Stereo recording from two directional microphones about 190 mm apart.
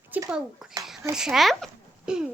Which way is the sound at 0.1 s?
10° right (ahead or behind).